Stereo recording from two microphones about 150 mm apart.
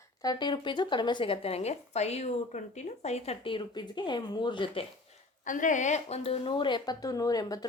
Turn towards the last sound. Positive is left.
turn(degrees=25)  # may be behind; listen again after turning